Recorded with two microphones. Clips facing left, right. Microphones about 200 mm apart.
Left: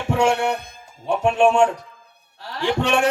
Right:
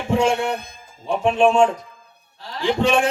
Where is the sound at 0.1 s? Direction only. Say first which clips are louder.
Even; 70° left (ahead or behind).